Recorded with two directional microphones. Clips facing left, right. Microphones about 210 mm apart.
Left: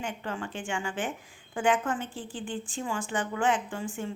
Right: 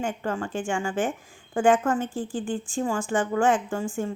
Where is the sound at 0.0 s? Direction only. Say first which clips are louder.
Right 6 dB; 45° right (ahead or behind).